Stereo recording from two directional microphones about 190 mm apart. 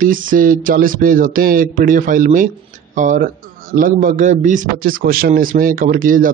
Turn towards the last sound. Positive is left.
turn(degrees=-45)  # may be behind; listen again after turning